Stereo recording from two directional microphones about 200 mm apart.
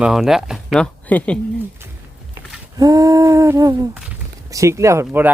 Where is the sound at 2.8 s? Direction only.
15° right (ahead or behind).